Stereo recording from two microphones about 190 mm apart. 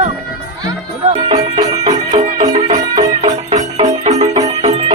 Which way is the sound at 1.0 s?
35° right (ahead or behind).